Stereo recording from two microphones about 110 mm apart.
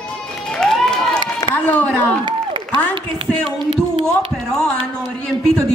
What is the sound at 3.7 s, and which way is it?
Speech, 65° right (ahead or behind).